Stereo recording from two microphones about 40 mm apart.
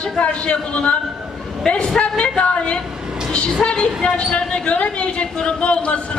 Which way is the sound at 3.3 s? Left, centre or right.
Left.